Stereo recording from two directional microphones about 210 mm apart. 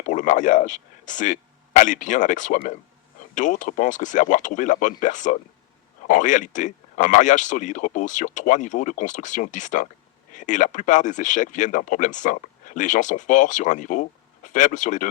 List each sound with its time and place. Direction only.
0.0 s a man's voice: 35° left (ahead or behind)